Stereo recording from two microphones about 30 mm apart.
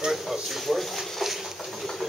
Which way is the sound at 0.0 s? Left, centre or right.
Centre.